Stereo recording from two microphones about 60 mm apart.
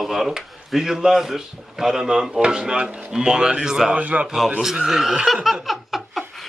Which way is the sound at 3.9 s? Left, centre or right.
Right.